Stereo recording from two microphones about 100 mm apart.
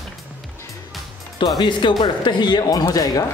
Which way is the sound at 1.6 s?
50° left (ahead or behind).